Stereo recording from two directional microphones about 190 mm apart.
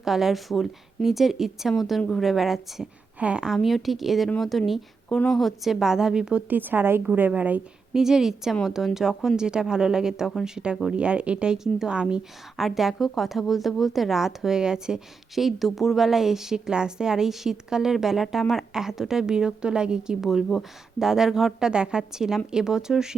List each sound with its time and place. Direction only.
0.0 s a woman's voice: centre (ahead or behind)